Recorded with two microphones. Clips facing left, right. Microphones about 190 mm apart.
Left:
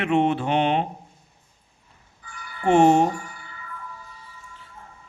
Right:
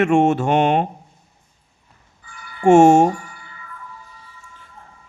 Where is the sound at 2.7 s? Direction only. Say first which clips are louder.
Right 6 dB; 45° right (ahead or behind).